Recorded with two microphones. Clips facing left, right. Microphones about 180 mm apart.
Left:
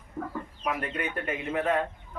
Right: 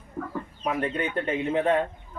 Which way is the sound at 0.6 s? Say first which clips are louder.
Right 4 dB; 25° right (ahead or behind).